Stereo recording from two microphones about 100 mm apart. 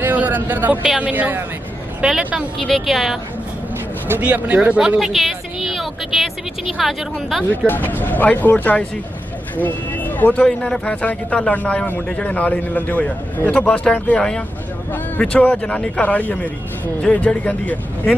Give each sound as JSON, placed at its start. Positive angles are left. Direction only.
{"t": 0.0, "sound": "a sound", "side_deg": -15}
{"t": 0.8, "sound": "a woman's voice", "side_deg": -10}
{"t": 4.1, "sound": "a woman's voice", "side_deg": -15}
{"t": 7.6, "sound": "speech", "side_deg": 20}